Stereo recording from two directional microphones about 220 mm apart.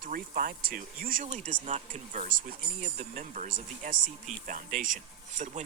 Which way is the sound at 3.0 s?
30° right (ahead or behind).